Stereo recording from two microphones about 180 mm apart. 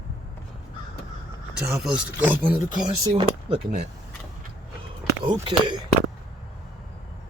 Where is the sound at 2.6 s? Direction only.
25° right (ahead or behind).